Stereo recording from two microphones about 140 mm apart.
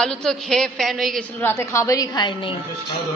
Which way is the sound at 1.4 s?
15° left (ahead or behind).